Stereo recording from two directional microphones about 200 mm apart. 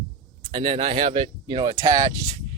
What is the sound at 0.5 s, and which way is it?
Speech, 30° right (ahead or behind).